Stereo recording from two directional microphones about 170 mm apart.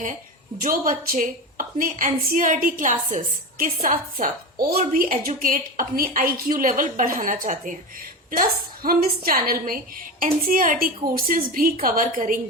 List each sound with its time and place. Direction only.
0.6 s a woman's voice: 55° right (ahead or behind)